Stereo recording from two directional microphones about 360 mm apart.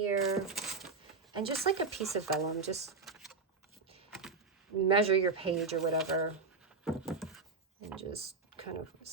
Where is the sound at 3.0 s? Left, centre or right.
Centre.